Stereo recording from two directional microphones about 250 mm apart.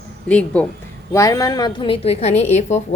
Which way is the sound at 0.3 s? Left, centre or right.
Centre.